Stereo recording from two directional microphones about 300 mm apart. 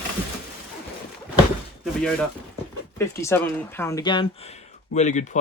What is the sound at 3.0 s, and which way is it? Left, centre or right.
Speech, centre.